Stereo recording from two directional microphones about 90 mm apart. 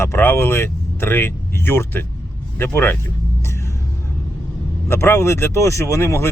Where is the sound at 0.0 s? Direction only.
25° left (ahead or behind).